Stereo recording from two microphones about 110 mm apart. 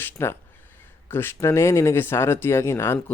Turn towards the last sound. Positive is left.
turn(degrees=25)  # may be behind; listen again after turning